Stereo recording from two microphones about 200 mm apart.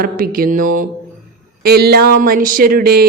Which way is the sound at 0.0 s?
45° right (ahead or behind).